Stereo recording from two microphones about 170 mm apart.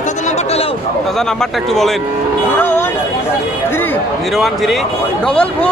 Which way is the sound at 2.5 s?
10° left (ahead or behind).